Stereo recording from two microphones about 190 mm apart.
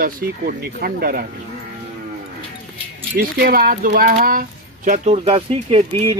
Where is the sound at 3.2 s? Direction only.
55° right (ahead or behind).